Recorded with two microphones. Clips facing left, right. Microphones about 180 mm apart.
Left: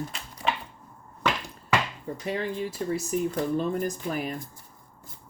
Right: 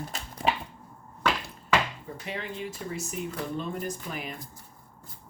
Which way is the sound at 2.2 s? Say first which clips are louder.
Left 6 dB; 40° left (ahead or behind).